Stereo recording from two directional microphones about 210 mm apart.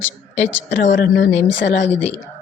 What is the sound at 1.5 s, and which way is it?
Speech, 60° left (ahead or behind).